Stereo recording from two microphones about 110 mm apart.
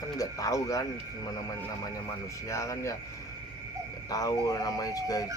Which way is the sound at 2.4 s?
30° left (ahead or behind).